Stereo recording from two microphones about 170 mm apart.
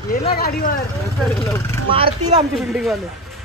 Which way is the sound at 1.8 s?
35° right (ahead or behind).